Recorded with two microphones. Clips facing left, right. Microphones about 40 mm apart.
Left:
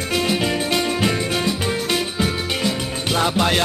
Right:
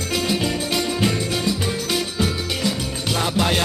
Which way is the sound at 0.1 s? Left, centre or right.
Left.